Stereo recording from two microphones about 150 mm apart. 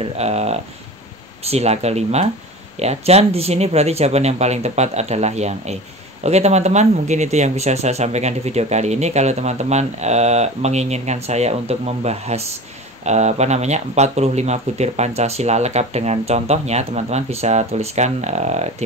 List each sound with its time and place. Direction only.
0.0 s speech: 45° right (ahead or behind)